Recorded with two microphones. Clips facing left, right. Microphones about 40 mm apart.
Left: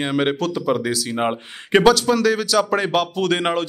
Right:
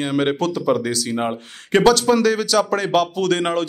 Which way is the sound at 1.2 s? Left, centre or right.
Centre.